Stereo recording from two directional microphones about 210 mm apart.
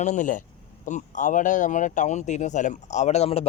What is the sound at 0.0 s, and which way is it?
Speech, 35° left (ahead or behind).